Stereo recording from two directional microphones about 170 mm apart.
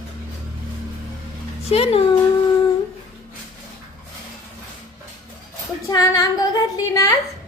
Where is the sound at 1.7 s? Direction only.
35° left (ahead or behind).